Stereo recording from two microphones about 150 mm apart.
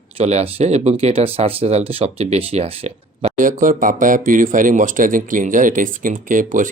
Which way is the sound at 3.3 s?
60° right (ahead or behind).